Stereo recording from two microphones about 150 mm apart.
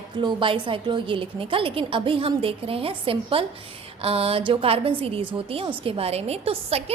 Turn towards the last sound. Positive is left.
turn(degrees=-40)  # may be behind; listen again after turning